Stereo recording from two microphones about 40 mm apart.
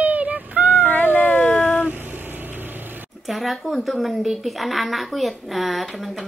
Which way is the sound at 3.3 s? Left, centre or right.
Centre.